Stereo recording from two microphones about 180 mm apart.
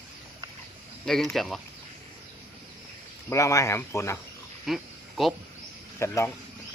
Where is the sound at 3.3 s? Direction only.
15° left (ahead or behind).